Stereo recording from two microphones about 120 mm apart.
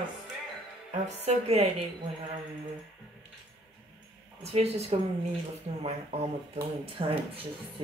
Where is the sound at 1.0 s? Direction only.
60° right (ahead or behind).